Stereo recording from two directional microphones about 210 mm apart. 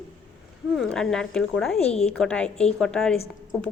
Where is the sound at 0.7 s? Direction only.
Centre (ahead or behind).